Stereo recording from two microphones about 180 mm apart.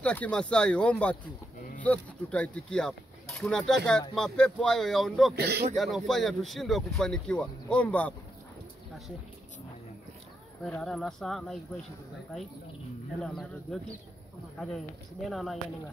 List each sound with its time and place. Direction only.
0.0 s speech: 5° left (ahead or behind)
5.3 s speech: 65° right (ahead or behind)
5.8 s speech: centre (ahead or behind)
10.8 s speech: 5° left (ahead or behind)
13.2 s speech: centre (ahead or behind)